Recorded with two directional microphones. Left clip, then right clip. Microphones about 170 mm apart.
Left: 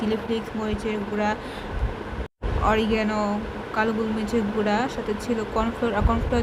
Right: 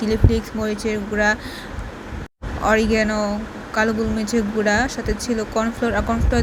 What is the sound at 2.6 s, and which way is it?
Speech, 20° right (ahead or behind).